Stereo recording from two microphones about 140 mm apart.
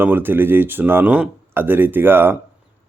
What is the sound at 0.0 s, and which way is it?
Speech, 15° right (ahead or behind).